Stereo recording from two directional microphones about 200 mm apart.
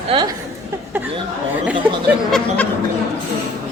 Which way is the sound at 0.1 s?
25° right (ahead or behind).